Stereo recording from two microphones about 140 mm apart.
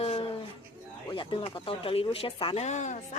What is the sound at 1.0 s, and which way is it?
Speech, 35° left (ahead or behind).